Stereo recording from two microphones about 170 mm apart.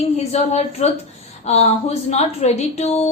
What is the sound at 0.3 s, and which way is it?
A woman's voice, 40° left (ahead or behind).